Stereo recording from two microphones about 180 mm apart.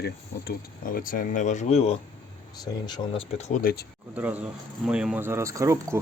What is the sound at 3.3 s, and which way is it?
Speech, 40° left (ahead or behind).